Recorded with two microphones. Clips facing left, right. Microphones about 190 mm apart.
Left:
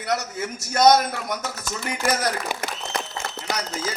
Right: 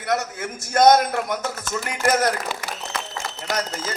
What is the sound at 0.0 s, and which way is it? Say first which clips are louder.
A man's voice: right 1 dB; 55° right (ahead or behind).